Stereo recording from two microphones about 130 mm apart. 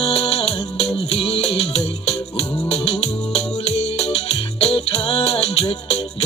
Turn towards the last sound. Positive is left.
turn(degrees=50)  # may be behind; listen again after turning